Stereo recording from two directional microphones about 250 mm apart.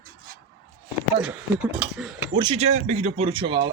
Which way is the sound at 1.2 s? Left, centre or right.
Centre.